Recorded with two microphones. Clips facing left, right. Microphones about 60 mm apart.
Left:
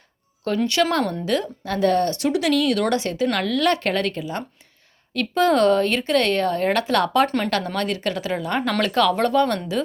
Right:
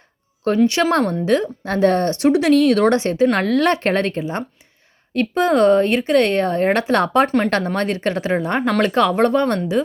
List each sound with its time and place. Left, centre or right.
0.6 s speech: right
7.3 s speech: centre
7.5 s speech: right